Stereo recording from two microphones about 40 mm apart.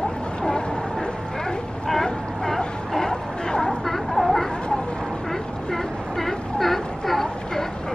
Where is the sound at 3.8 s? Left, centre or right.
Centre.